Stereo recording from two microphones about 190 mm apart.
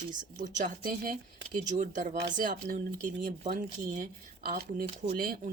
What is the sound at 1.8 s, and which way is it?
A woman's voice, 40° right (ahead or behind).